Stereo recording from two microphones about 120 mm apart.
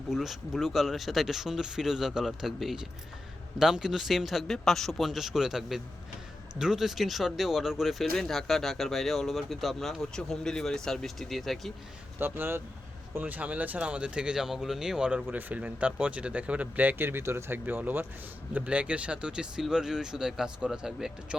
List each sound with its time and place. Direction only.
0.1 s speech: centre (ahead or behind)
12.2 s speech: 20° right (ahead or behind)